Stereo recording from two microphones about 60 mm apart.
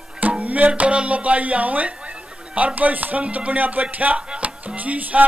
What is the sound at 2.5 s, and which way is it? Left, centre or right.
Speech, right.